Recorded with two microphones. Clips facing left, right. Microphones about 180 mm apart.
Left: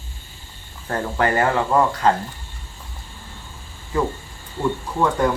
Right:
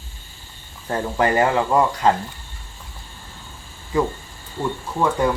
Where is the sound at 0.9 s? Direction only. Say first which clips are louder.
Right 1 dB; 15° right (ahead or behind).